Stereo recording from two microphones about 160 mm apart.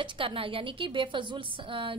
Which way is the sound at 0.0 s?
35° right (ahead or behind).